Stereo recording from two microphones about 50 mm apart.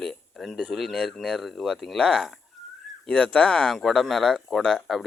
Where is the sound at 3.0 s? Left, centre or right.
Centre.